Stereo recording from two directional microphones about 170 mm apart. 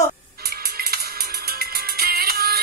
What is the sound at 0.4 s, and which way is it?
Music, 60° right (ahead or behind).